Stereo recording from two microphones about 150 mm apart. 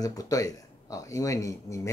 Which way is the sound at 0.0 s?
25° left (ahead or behind).